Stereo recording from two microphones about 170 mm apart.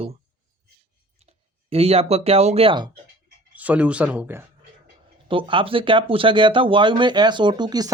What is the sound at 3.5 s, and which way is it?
Speech, 10° right (ahead or behind).